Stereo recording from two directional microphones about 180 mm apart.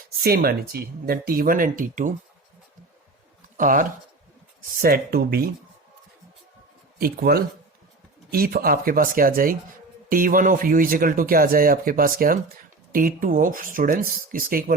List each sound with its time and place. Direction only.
0.2 s speech: 60° right (ahead or behind)
3.6 s speech: 50° right (ahead or behind)
7.0 s speech: 55° right (ahead or behind)